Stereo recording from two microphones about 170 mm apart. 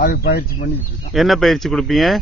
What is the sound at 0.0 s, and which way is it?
Speech, 65° left (ahead or behind).